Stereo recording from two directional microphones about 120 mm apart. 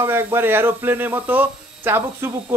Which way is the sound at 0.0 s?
20° right (ahead or behind).